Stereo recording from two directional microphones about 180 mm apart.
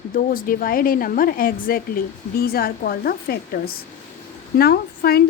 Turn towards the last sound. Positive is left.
turn(degrees=60)  # may be behind; listen again after turning